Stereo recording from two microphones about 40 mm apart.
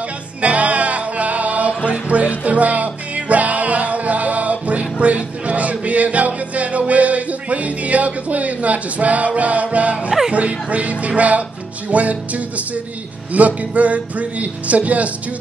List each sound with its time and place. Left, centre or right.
0.4 s music: right
5.0 s a sound: right
10.3 s speech: right